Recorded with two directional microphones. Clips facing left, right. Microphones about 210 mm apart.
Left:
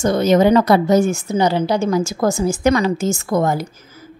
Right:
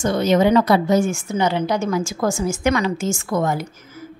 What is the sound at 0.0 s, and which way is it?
A woman's voice, 40° left (ahead or behind).